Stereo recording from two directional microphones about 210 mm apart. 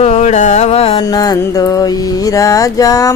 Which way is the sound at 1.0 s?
20° left (ahead or behind).